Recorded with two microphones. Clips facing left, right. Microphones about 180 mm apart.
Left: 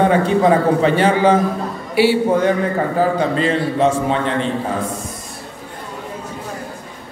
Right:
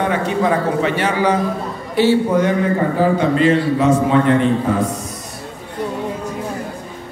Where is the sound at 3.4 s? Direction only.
35° left (ahead or behind).